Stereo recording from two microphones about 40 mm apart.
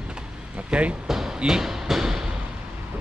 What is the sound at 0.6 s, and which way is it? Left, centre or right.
Speech, right.